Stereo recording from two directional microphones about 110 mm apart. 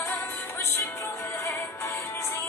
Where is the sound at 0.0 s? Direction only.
25° left (ahead or behind).